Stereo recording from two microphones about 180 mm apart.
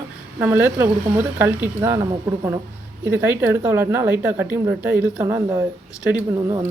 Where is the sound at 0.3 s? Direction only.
10° right (ahead or behind).